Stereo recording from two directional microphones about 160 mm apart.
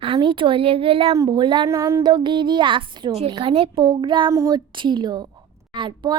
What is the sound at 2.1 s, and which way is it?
A woman's voice, 30° right (ahead or behind).